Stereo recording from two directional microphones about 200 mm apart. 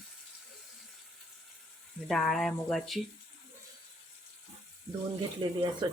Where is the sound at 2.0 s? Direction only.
Centre (ahead or behind).